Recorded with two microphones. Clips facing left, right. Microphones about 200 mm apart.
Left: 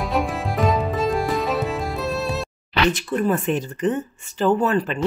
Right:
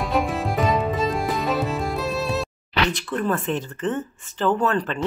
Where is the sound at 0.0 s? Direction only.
Centre (ahead or behind).